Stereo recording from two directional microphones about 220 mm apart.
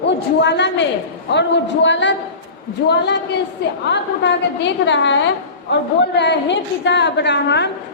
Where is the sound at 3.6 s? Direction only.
50° left (ahead or behind).